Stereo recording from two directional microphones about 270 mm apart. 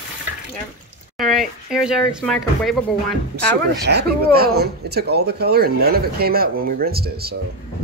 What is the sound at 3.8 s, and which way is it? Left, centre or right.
Speech, right.